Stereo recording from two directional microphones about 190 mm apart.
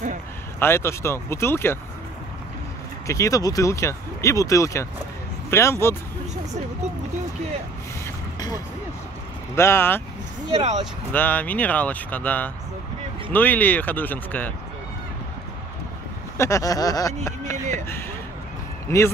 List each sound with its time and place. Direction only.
0.6 s speech: 10° left (ahead or behind)
3.1 s speech: 15° left (ahead or behind)
8.4 s speech: 20° left (ahead or behind)
11.1 s speech: 10° left (ahead or behind)
16.3 s speech: 15° left (ahead or behind)
17.5 s a sound: 40° right (ahead or behind)
18.9 s speech: 15° left (ahead or behind)